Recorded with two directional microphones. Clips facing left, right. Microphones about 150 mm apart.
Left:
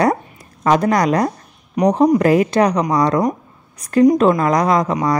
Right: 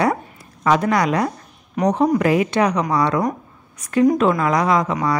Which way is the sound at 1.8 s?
20° left (ahead or behind).